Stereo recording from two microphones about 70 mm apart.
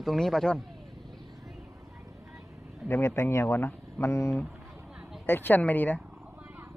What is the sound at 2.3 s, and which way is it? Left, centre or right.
Vehicle, centre.